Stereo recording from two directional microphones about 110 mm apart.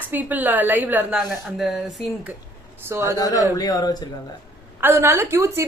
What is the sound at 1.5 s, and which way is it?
Speech, 5° right (ahead or behind).